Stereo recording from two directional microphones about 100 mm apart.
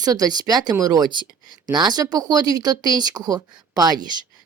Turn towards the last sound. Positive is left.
turn(degrees=-40)  # may be behind; listen again after turning